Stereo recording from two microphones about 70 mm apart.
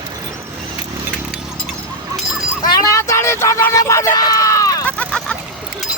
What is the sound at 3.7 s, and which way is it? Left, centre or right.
Speech, left.